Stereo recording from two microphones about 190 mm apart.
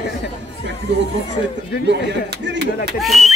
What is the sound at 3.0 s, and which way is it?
Speech, centre (ahead or behind).